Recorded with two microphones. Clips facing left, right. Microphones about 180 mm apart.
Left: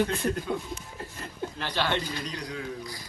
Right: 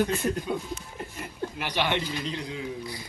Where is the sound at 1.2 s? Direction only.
15° right (ahead or behind).